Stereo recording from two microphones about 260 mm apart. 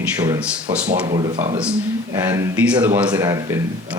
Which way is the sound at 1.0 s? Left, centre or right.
Centre.